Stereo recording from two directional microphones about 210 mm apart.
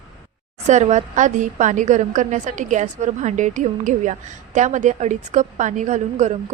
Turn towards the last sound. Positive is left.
turn(degrees=-35)  # may be behind; listen again after turning